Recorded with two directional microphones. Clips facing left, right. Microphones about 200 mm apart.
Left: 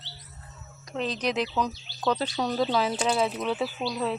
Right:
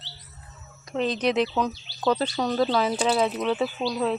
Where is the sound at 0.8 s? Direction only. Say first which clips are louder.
Right 5 dB; centre (ahead or behind).